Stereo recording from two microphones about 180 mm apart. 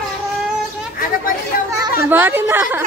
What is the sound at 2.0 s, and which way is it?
Speech, 10° right (ahead or behind).